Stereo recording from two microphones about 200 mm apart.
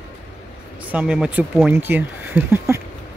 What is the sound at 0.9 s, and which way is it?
Speech, 5° right (ahead or behind).